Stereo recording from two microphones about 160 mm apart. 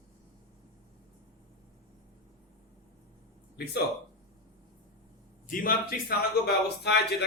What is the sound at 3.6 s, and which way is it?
Speech, 85° left.